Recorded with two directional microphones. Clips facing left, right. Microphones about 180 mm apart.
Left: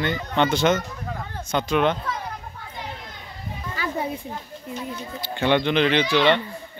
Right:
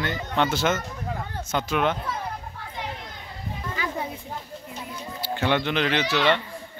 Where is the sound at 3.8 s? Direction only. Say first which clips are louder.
Left 2 dB; 15° right (ahead or behind).